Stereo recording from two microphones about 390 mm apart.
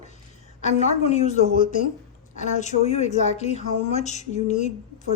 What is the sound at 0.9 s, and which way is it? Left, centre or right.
A woman's voice, centre.